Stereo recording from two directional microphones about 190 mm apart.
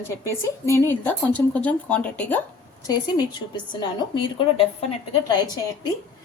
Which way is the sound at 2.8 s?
20° left (ahead or behind).